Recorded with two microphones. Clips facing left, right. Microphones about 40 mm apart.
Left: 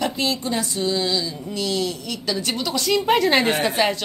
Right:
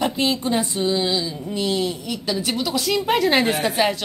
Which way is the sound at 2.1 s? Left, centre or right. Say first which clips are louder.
Right 1 dB; centre.